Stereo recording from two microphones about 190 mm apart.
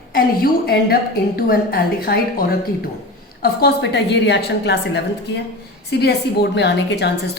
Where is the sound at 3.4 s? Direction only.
60° left (ahead or behind).